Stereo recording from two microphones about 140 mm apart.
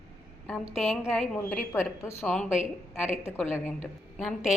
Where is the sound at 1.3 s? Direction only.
15° left (ahead or behind).